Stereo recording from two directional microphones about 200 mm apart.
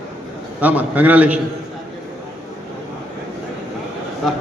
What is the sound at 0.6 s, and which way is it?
Speech, 5° right (ahead or behind).